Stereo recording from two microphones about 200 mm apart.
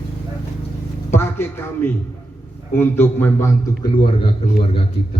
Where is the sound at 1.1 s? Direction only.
10° left (ahead or behind).